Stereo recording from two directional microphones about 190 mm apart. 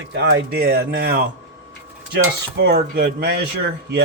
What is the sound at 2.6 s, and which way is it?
Speech, 55° right (ahead or behind).